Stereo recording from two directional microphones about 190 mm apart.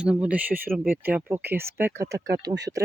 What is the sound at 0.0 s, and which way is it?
Speech, 5° right (ahead or behind).